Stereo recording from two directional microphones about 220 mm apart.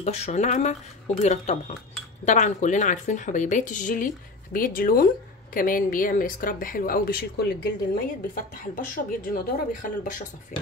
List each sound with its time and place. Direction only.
0.0 s a woman's voice: 30° left (ahead or behind)
8.7 s a woman's voice: 40° left (ahead or behind)